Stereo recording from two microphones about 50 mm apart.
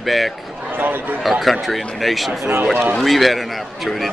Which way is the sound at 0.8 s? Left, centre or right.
Right.